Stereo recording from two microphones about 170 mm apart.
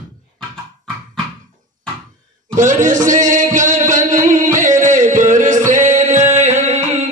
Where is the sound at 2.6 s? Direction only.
50° right (ahead or behind).